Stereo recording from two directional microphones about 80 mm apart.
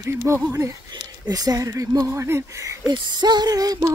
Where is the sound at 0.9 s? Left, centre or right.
Right.